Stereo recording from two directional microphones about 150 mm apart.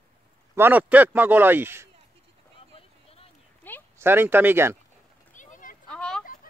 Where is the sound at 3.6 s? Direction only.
10° left (ahead or behind).